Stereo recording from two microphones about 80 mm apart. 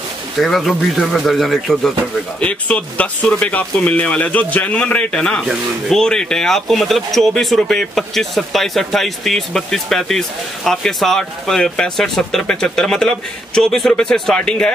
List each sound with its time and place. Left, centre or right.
0.4 s speech: centre
2.4 s speech: centre